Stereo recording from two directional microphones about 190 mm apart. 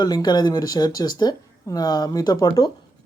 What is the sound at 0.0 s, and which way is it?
Speech, 20° left (ahead or behind).